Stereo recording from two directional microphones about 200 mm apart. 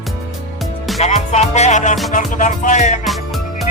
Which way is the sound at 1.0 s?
35° left (ahead or behind).